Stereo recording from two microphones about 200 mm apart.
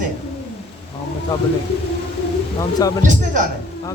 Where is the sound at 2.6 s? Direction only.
20° left (ahead or behind).